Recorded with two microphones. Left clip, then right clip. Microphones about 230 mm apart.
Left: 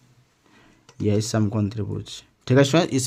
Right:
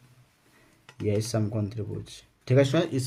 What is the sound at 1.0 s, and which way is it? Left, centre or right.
Speech, left.